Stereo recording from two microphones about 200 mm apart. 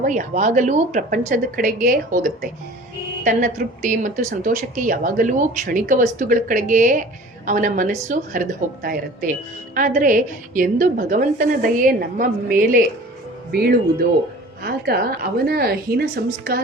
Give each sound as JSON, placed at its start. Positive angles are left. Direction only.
{"t": 0.0, "sound": "a woman's voice", "side_deg": -40}
{"t": 14.6, "sound": "a woman's voice", "side_deg": -50}